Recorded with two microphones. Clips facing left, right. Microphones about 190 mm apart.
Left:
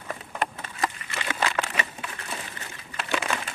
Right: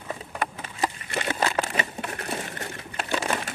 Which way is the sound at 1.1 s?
45° right (ahead or behind).